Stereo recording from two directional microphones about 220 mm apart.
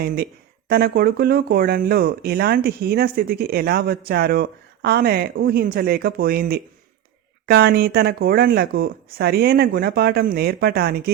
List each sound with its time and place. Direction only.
0.7 s speech: 45° right (ahead or behind)